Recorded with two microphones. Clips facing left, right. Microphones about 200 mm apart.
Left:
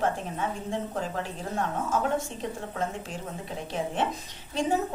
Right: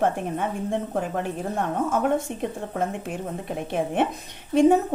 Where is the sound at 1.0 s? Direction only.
55° right (ahead or behind).